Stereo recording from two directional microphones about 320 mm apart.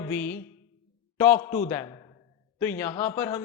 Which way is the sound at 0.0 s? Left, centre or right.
Centre.